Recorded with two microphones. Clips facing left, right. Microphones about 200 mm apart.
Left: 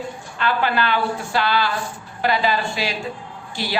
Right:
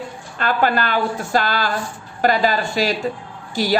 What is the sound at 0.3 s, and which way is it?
Speech, 45° right (ahead or behind).